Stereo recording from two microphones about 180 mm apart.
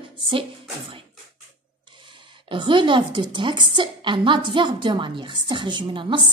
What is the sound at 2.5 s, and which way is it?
A woman's voice, 25° right (ahead or behind).